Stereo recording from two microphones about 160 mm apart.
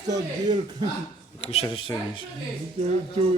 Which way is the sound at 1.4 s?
35° left (ahead or behind).